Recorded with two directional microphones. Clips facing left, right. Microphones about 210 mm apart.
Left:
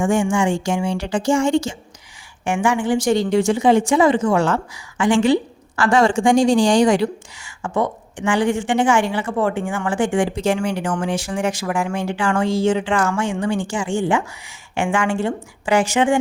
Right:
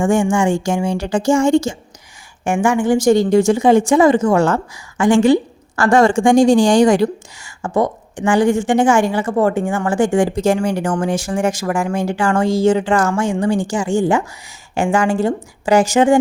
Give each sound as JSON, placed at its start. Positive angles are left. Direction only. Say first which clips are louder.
{"t": 0.0, "sound": "a woman's voice", "louder": "right 3 dB", "side_deg": -45}